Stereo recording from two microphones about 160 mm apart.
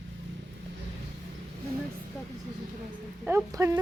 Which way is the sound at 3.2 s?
10° right (ahead or behind).